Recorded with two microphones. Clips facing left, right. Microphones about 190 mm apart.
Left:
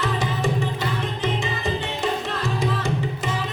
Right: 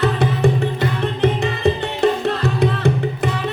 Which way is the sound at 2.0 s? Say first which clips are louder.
Right 8 dB; 65° right (ahead or behind).